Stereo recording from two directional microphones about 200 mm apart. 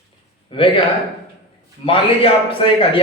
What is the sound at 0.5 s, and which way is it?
Speech, 25° left (ahead or behind).